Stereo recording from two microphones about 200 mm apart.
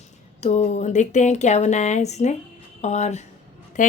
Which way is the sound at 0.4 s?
35° left (ahead or behind).